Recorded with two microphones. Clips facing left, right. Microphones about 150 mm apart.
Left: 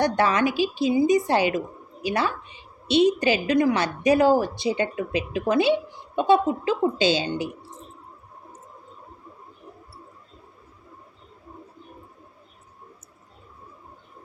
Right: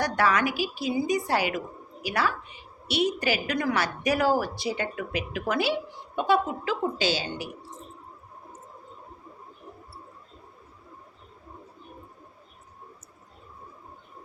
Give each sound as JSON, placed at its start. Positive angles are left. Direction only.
{"t": 0.0, "sound": "a woman's voice", "side_deg": 25}